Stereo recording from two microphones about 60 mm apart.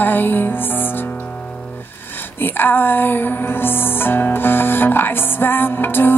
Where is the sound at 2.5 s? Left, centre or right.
Left.